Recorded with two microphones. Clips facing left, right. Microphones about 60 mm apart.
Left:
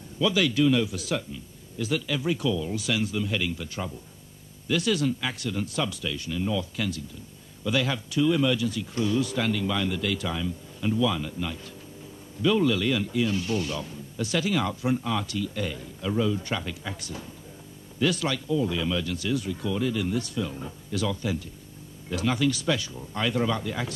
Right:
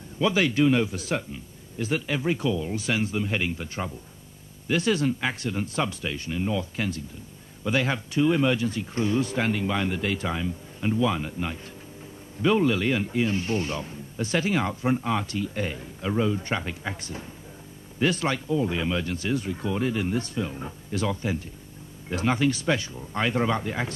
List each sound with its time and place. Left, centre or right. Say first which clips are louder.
0.2 s speech: right 1 dB; right